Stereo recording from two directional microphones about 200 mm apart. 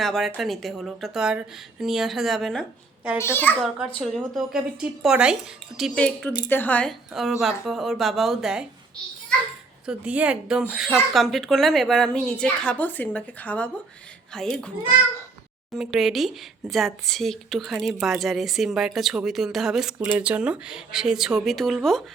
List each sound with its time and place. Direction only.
0.0 s a woman's voice: centre (ahead or behind)
3.2 s a child's voice: 10° left (ahead or behind)
4.0 s a woman's voice: centre (ahead or behind)
6.3 s speech: 20° left (ahead or behind)
6.6 s a woman's voice: 5° left (ahead or behind)
9.8 s a woman's voice: 5° right (ahead or behind)
15.8 s a woman's voice: centre (ahead or behind)